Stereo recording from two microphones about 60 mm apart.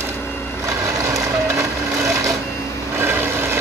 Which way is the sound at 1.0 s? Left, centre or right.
Right.